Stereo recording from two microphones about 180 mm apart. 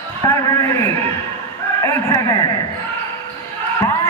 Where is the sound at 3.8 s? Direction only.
15° left (ahead or behind).